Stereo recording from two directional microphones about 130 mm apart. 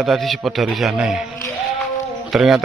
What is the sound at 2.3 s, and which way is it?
Speech, 5° right (ahead or behind).